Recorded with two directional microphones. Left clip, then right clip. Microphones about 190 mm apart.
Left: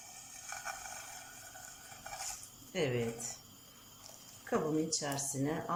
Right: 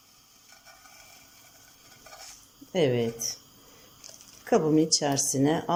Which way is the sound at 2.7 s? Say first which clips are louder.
Right 10 dB; 35° right (ahead or behind).